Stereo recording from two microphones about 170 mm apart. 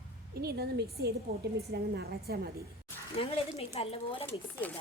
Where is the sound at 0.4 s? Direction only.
70° right (ahead or behind).